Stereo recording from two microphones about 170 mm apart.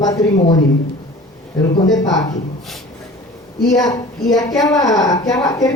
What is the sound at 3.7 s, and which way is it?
A woman's voice, 20° left (ahead or behind).